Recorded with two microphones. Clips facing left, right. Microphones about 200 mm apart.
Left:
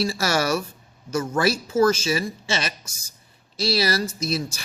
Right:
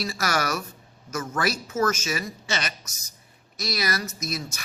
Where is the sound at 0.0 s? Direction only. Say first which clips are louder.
Left 4 dB; 30° left (ahead or behind).